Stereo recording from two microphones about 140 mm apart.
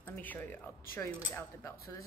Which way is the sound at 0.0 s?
15° left (ahead or behind).